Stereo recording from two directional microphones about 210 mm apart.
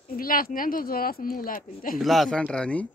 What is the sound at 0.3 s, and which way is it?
Speech, 40° left (ahead or behind).